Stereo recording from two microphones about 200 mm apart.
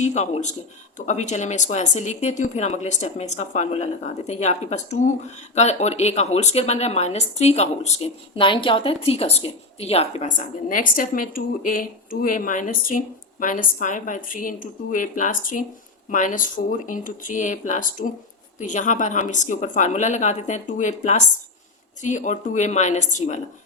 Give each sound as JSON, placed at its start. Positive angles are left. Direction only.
{"t": 0.0, "sound": "speech", "side_deg": 35}